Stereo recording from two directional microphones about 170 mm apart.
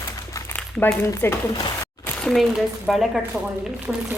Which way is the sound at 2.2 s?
Centre (ahead or behind).